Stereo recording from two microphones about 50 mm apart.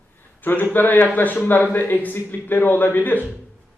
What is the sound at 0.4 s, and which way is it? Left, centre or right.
A man's voice, left.